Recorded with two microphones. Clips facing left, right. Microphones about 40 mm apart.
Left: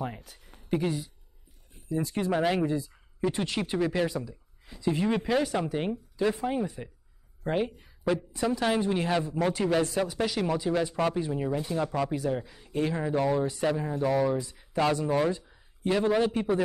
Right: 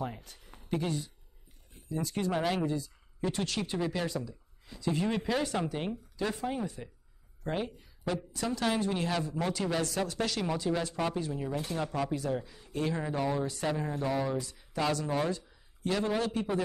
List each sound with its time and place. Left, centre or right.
0.2 s speech: centre
11.7 s speech: centre
14.2 s speech: left